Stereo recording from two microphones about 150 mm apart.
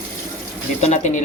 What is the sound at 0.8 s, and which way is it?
Speech, 55° left (ahead or behind).